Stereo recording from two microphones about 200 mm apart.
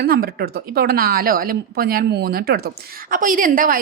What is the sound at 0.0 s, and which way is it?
A woman's voice, 50° right (ahead or behind).